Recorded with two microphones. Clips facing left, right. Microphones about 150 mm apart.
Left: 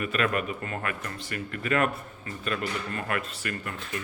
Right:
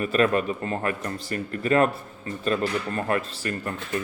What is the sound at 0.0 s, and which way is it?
Speech, 35° right (ahead or behind).